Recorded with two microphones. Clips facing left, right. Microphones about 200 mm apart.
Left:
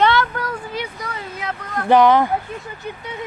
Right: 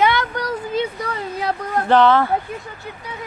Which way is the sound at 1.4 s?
35° right (ahead or behind).